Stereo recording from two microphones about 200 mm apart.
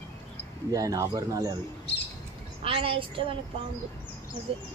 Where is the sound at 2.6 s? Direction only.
25° right (ahead or behind).